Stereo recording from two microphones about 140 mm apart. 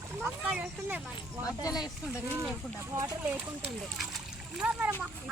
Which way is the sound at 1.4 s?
25° left (ahead or behind).